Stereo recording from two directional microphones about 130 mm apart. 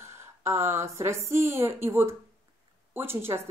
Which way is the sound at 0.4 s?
20° right (ahead or behind).